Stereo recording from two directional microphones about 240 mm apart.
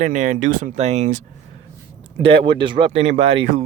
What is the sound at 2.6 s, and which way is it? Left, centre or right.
Speech, centre.